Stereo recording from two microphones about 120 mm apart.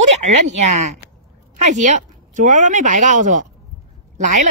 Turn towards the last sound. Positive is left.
turn(degrees=-90)